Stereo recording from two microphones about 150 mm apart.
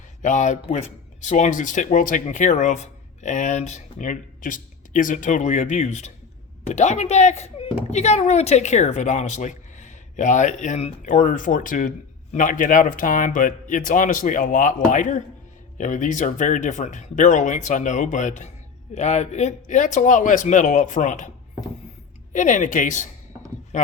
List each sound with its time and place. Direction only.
0.2 s speech: 55° left (ahead or behind)
22.3 s speech: 60° left (ahead or behind)